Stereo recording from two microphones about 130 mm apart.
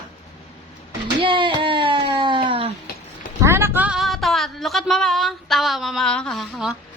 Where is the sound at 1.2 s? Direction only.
40° right (ahead or behind).